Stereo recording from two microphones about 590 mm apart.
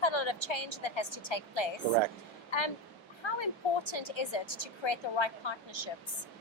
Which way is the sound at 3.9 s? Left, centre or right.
Left.